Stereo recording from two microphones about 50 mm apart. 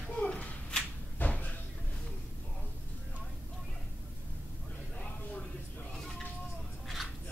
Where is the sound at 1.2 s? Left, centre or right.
Left.